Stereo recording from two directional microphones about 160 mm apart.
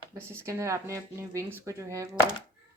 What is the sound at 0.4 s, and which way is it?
Speech, 20° right (ahead or behind).